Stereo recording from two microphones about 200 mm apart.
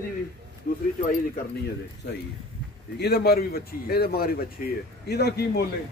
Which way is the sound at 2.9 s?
55° left (ahead or behind).